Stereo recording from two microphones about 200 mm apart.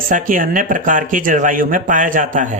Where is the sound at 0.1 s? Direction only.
40° right (ahead or behind).